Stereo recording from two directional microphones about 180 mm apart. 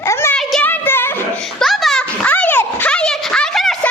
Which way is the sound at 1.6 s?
Centre (ahead or behind).